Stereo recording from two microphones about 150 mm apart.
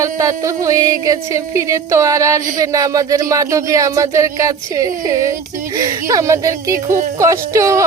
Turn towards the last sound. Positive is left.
turn(degrees=-20)  # may be behind; listen again after turning